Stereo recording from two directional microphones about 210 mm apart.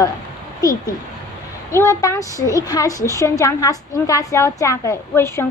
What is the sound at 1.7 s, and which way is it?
A woman's voice, 15° left (ahead or behind).